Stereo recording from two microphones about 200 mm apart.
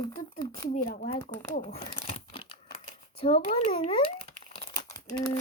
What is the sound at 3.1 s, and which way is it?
Speech, 25° left (ahead or behind).